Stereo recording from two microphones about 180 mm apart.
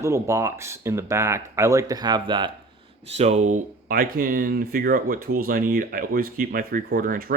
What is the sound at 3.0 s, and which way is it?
Speech, 35° right (ahead or behind).